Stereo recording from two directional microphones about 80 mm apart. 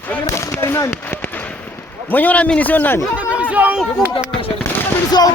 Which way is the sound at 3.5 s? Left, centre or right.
Centre.